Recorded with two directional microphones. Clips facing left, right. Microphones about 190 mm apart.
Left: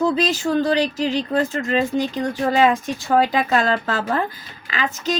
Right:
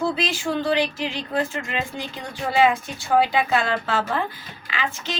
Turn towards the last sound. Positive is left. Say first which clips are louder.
# left 5 dB
turn(degrees=40)  # may be behind; listen again after turning